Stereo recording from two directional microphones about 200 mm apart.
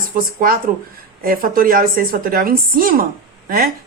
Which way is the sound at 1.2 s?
45° right (ahead or behind).